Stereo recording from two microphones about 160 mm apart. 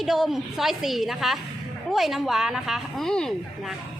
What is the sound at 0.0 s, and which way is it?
A woman's voice, centre (ahead or behind).